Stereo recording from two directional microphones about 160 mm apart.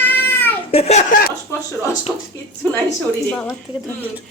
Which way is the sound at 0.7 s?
40° left (ahead or behind).